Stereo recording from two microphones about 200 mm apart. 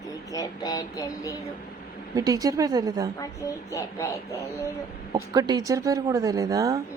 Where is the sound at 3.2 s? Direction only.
15° left (ahead or behind).